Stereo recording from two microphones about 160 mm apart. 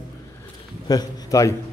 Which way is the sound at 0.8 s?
20° left (ahead or behind).